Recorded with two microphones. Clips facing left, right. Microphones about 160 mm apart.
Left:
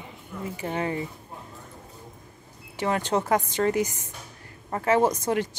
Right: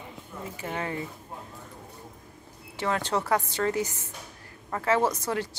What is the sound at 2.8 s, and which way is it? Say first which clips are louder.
Speech: left 3 dB; 15° left (ahead or behind).